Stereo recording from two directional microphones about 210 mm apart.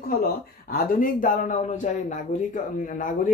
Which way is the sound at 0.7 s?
40° left (ahead or behind).